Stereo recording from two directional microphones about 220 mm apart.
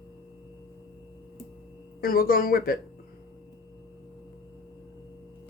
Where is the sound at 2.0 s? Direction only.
40° left (ahead or behind).